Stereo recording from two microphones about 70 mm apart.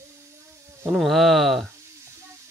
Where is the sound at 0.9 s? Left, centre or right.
Centre.